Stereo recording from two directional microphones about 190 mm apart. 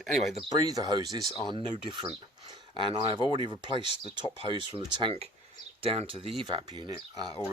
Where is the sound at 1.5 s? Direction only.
25° right (ahead or behind).